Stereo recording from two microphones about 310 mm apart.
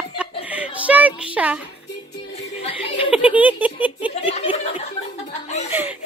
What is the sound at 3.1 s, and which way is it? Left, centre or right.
Speech, centre.